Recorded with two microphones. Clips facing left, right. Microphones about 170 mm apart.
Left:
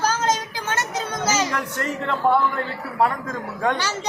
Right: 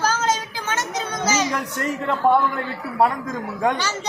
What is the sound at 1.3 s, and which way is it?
Speech, 15° right (ahead or behind).